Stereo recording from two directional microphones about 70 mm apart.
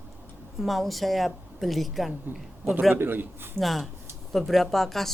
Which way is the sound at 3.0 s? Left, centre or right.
Right.